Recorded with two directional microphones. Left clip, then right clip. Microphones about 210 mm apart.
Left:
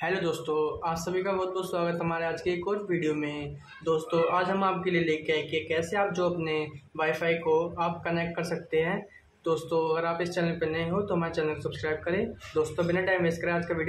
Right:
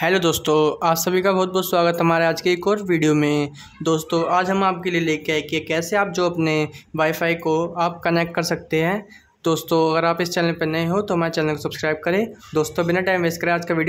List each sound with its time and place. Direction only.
0.0 s speech: 45° right (ahead or behind)